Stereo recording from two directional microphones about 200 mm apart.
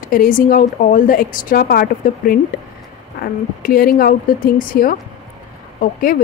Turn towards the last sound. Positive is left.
turn(degrees=45)  # may be behind; listen again after turning